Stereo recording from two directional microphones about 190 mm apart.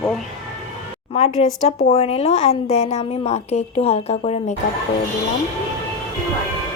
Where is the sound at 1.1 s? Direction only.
35° left (ahead or behind).